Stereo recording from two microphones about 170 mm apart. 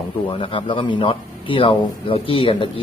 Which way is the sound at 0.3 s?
30° left (ahead or behind).